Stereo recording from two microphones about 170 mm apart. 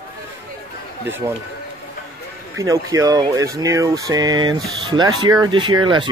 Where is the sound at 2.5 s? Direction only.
20° right (ahead or behind).